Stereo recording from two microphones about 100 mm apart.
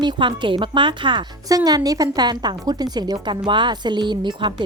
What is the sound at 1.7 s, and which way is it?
A woman's voice, 40° right (ahead or behind).